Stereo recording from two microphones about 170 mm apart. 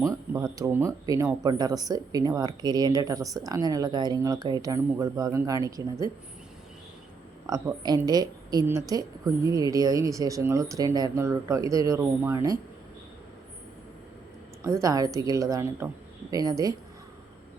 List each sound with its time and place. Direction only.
0.0 s a woman's voice: 20° right (ahead or behind)
7.4 s a woman's voice: 20° right (ahead or behind)
14.6 s a woman's voice: 20° right (ahead or behind)